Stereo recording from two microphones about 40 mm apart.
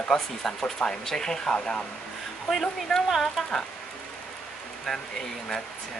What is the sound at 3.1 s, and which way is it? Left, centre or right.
Speech, centre.